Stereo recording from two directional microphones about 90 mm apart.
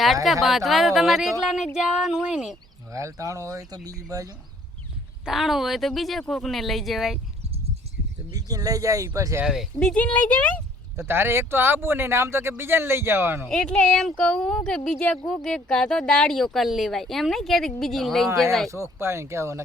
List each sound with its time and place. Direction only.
0.4 s speech: centre (ahead or behind)
2.9 s speech: 35° right (ahead or behind)
5.2 s speech: 5° right (ahead or behind)
8.3 s speech: 40° right (ahead or behind)
9.4 s speech: 5° right (ahead or behind)
9.8 s speech: 15° left (ahead or behind)
10.9 s speech: 25° right (ahead or behind)
13.5 s speech: 10° left (ahead or behind)
18.7 s speech: 30° right (ahead or behind)